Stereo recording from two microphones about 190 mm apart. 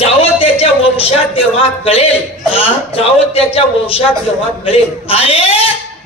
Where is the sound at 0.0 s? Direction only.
30° left (ahead or behind).